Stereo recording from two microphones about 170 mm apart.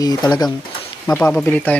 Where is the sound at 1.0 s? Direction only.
10° left (ahead or behind).